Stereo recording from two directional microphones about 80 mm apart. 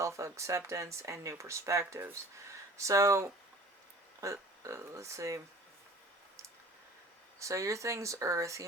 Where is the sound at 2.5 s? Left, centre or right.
Right.